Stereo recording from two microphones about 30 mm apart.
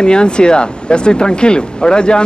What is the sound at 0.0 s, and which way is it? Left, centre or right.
Speech, left.